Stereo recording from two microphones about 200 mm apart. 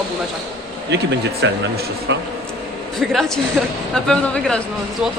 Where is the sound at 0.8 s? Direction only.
60° right (ahead or behind).